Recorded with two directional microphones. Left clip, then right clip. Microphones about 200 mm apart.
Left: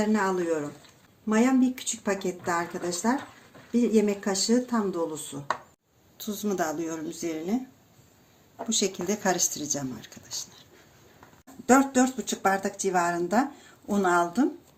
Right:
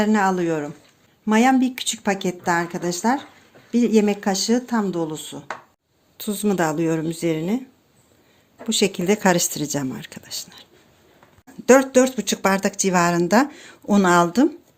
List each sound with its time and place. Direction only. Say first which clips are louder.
0.0 s speech: right 7 dB; 45° right (ahead or behind)
8.7 s speech: right 8 dB; 45° right (ahead or behind)
11.6 s speech: right 7 dB; 45° right (ahead or behind)